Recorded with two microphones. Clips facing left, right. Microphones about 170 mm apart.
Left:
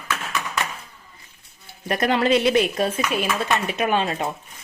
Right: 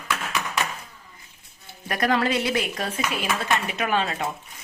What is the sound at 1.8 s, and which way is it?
Speech, 25° left (ahead or behind).